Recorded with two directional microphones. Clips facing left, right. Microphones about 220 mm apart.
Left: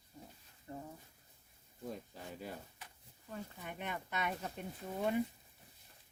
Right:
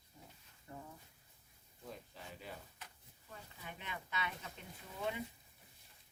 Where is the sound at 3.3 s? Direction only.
50° left (ahead or behind).